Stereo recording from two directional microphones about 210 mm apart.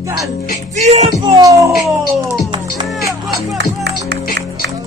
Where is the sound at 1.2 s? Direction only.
15° right (ahead or behind).